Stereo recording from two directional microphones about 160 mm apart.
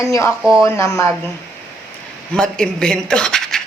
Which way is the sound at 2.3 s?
5° left (ahead or behind).